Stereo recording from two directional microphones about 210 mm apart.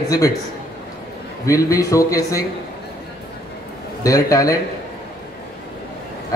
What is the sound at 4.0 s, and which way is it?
Speech, 15° left (ahead or behind).